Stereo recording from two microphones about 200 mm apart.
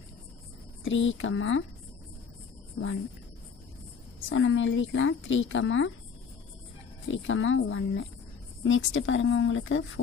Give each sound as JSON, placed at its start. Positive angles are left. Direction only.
{"t": 0.8, "sound": "a woman's voice", "side_deg": 75}
{"t": 4.2, "sound": "a woman's voice", "side_deg": 80}
{"t": 7.1, "sound": "a woman's voice", "side_deg": 75}